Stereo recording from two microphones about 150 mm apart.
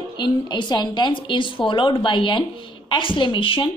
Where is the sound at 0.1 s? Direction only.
30° left (ahead or behind).